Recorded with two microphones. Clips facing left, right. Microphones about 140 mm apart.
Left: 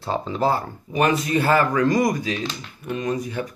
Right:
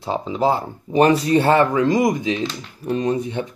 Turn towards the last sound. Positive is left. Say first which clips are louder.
# right 4 dB
turn(degrees=-25)  # may be behind; listen again after turning